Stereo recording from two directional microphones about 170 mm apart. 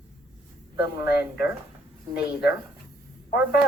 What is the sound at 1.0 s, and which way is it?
Speech, 70° left (ahead or behind).